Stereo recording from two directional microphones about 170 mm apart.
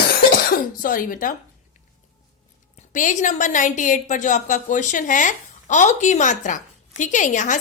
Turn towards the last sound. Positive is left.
turn(degrees=45)  # may be behind; listen again after turning